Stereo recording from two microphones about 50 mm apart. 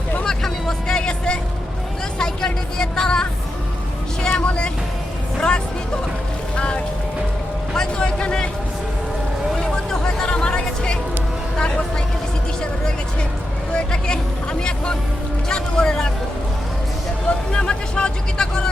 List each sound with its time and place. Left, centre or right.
0.3 s vehicle: centre
5.4 s music: left
7.7 s speech: centre
9.9 s music: centre
13.7 s speech: centre
17.2 s speech: centre